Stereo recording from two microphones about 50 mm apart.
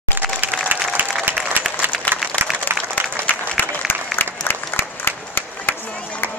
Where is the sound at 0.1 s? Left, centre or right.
Right.